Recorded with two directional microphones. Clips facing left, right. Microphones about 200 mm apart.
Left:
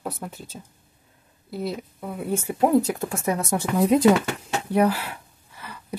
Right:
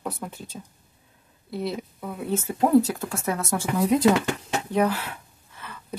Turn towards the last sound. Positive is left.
turn(degrees=10)  # may be behind; listen again after turning